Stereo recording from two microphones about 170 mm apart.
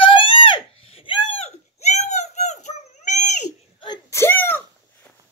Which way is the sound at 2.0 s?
40° left (ahead or behind).